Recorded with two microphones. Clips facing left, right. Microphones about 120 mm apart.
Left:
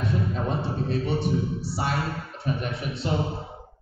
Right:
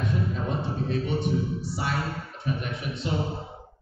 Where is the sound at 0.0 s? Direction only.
35° left (ahead or behind).